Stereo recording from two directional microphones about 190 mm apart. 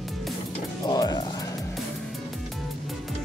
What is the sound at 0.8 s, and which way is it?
Music, 20° left (ahead or behind).